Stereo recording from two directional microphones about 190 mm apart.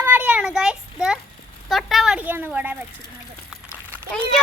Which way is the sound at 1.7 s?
Centre (ahead or behind).